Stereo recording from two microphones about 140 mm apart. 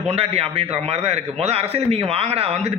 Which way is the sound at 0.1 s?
45° right (ahead or behind).